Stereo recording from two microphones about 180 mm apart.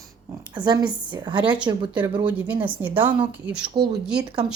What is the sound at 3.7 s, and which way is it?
Speech, 25° right (ahead or behind).